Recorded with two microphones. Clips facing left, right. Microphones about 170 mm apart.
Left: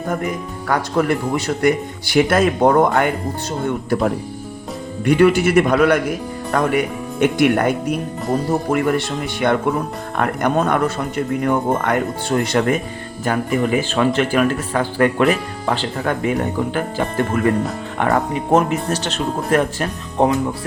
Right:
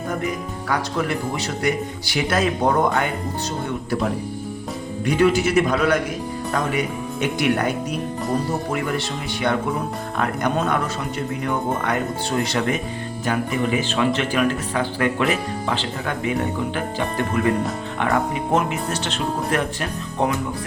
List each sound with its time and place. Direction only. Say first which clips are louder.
0.7 s speech: left 5 dB; 50° left (ahead or behind)
5.0 s speech: left 4 dB; 60° left (ahead or behind); by 20.3 s 40° left (ahead or behind)